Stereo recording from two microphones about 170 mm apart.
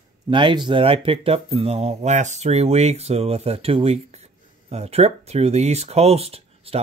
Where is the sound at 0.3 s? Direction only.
30° right (ahead or behind).